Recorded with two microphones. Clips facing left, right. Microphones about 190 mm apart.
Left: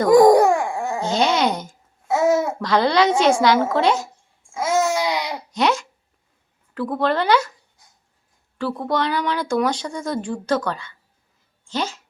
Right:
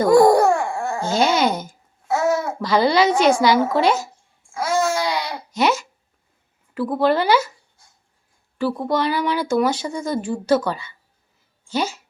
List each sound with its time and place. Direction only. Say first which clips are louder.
0.1 s dog: left 2 dB; 15° left (ahead or behind)
1.0 s wail: right 1 dB; 5° right (ahead or behind)
2.0 s babbling: left 2 dB; 20° left (ahead or behind)
2.6 s a woman's voice: right 1 dB; 5° right (ahead or behind)
4.5 s a sound: left 1 dB; 20° left (ahead or behind)
5.5 s a sound: right 1 dB; 5° right (ahead or behind)
6.7 s speech: right 2 dB; 5° right (ahead or behind)
8.5 s speech: right 2 dB; 5° right (ahead or behind)